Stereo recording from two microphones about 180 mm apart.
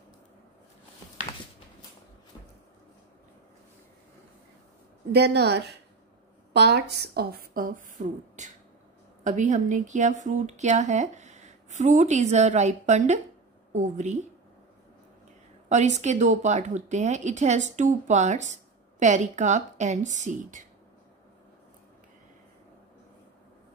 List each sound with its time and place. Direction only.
5.1 s a woman's voice: 65° right (ahead or behind); by 14.2 s 40° right (ahead or behind)
15.7 s a woman's voice: 40° right (ahead or behind)